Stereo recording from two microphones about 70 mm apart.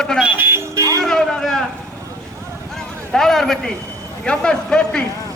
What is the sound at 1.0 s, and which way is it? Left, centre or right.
Speech, centre.